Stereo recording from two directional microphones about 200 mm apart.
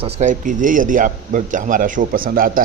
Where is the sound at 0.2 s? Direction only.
40° right (ahead or behind).